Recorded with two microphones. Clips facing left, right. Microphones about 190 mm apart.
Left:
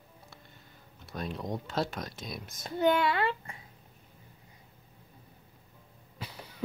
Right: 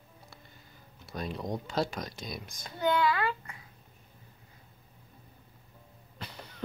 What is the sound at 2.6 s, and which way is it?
A child's voice, 25° left (ahead or behind).